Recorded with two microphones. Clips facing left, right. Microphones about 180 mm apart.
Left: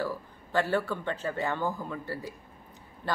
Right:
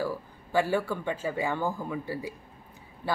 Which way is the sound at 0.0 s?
10° right (ahead or behind).